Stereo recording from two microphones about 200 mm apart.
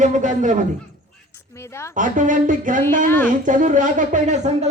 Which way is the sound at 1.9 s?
40° right (ahead or behind).